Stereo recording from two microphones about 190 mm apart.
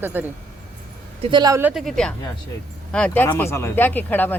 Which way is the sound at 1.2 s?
25° right (ahead or behind).